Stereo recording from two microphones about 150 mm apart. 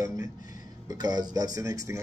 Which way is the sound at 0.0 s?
20° right (ahead or behind).